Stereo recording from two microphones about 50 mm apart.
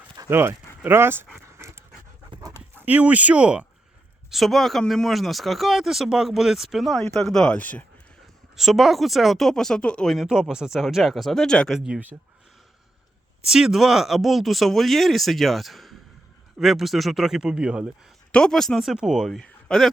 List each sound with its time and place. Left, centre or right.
0.3 s speech: right
2.8 s speech: right
4.3 s speech: centre
7.0 s speech: centre
7.5 s speech: left
8.5 s speech: centre
9.8 s speech: left
10.5 s speech: centre
11.9 s speech: right
13.5 s a man's voice: centre
18.3 s speech: centre
18.9 s a man's voice: centre
19.4 s a sound: centre